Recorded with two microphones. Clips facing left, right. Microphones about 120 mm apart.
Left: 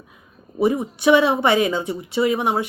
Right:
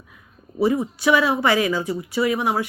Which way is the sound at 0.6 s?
20° left (ahead or behind).